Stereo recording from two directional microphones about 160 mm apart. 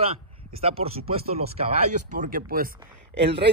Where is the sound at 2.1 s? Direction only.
60° right (ahead or behind).